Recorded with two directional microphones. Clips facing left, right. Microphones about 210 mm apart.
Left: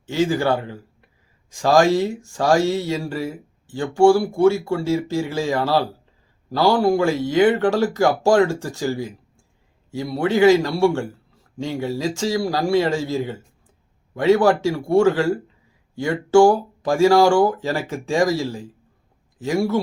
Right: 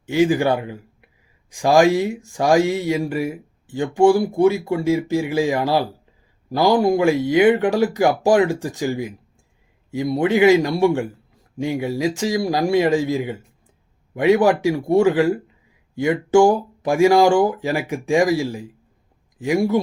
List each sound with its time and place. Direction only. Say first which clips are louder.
0.0 s speech: right 3 dB; 15° right (ahead or behind)